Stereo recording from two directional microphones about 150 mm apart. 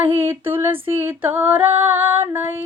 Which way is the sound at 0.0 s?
15° right (ahead or behind).